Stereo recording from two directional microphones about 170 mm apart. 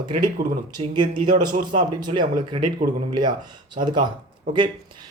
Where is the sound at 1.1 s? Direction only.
55° right (ahead or behind).